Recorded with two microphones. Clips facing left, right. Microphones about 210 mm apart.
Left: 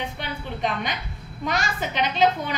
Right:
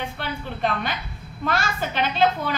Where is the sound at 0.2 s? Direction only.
15° left (ahead or behind).